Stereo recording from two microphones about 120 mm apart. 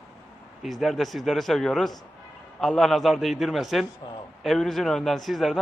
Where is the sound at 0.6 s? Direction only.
Centre (ahead or behind).